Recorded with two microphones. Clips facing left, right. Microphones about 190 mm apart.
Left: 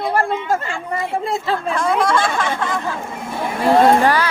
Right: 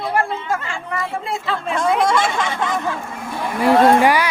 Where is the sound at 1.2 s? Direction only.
35° left (ahead or behind).